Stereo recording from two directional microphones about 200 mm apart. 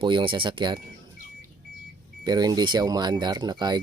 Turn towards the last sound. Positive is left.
turn(degrees=-20)  # may be behind; listen again after turning